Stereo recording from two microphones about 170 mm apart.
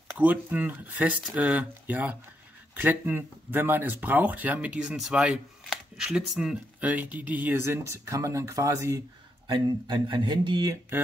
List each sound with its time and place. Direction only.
0.2 s speech: 10° right (ahead or behind)
9.5 s speech: 25° right (ahead or behind)